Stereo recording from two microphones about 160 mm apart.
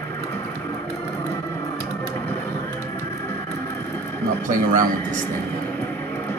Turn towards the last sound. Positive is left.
turn(degrees=-55)  # may be behind; listen again after turning